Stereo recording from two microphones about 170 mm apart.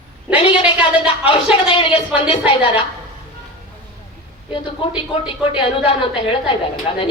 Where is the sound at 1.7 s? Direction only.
30° left (ahead or behind).